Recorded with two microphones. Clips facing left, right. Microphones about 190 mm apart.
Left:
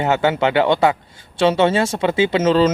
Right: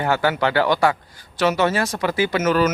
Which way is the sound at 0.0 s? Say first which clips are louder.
Left 3 dB; 20° left (ahead or behind).